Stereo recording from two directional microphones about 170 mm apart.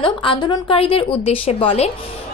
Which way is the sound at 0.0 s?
30° left (ahead or behind).